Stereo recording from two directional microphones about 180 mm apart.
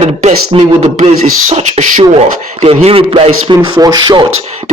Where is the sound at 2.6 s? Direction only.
30° right (ahead or behind).